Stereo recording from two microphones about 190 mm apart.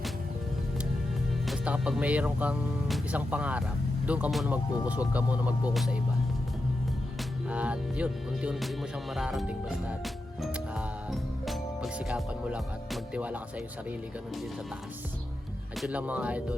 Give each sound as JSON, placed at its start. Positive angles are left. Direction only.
{"t": 1.5, "sound": "speech", "side_deg": -5}
{"t": 7.5, "sound": "music", "side_deg": -5}
{"t": 9.1, "sound": "speech", "side_deg": 0}
{"t": 15.8, "sound": "speech", "side_deg": -5}